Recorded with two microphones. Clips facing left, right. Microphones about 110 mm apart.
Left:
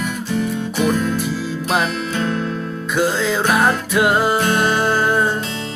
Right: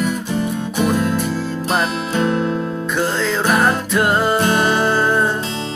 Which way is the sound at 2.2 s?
25° right (ahead or behind).